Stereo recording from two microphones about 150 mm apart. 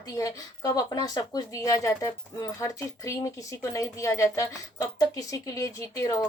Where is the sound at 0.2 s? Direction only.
25° left (ahead or behind).